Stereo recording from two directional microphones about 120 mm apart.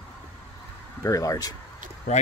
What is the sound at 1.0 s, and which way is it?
Speech, 30° left (ahead or behind).